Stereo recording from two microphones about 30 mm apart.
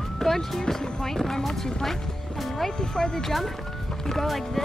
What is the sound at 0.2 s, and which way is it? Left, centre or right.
Speech, centre.